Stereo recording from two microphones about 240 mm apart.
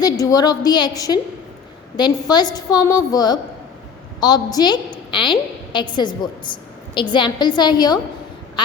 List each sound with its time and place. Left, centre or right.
0.0 s a woman's voice: centre